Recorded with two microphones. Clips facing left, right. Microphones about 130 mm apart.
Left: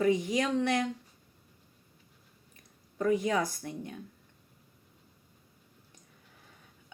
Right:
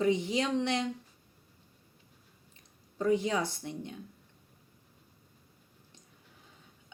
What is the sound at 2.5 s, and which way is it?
Speech, 25° right (ahead or behind).